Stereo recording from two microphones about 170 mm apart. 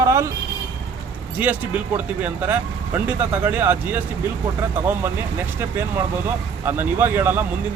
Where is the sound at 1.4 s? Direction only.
10° right (ahead or behind).